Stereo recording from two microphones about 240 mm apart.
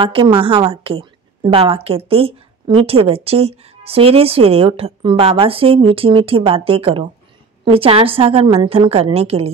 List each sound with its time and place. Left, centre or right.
0.0 s a woman's voice: right